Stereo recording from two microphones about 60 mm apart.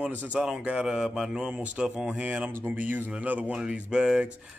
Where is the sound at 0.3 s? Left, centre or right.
Centre.